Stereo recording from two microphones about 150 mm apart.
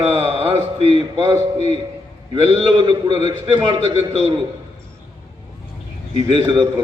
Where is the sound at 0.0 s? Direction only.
35° right (ahead or behind).